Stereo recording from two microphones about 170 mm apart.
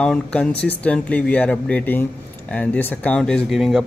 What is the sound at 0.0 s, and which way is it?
Speech, 5° left (ahead or behind).